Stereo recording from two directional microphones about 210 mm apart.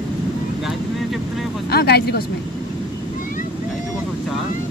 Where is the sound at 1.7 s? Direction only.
50° left (ahead or behind).